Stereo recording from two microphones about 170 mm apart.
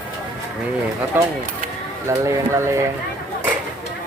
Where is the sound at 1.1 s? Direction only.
10° right (ahead or behind).